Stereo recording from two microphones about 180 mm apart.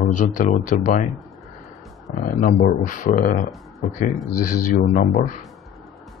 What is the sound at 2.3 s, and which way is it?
Speech, 45° left (ahead or behind).